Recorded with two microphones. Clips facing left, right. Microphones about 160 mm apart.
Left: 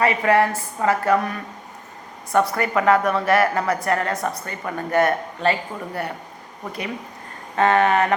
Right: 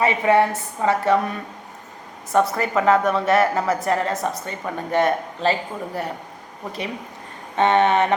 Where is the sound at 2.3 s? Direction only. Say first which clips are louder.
Even; centre (ahead or behind).